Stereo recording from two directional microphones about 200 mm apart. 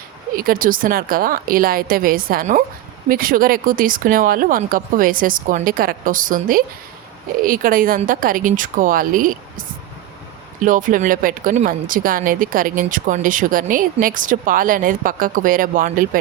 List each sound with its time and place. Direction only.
0.3 s speech: 45° right (ahead or behind)